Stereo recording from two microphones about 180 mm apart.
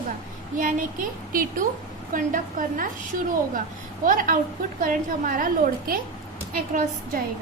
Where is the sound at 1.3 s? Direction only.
50° right (ahead or behind).